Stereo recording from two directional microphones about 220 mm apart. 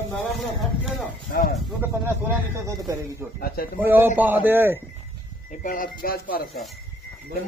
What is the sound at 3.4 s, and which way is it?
Speech, 45° left (ahead or behind).